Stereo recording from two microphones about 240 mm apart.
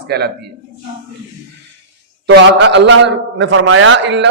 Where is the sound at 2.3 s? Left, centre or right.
Right.